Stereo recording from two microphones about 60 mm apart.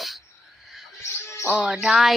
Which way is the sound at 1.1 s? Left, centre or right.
Left.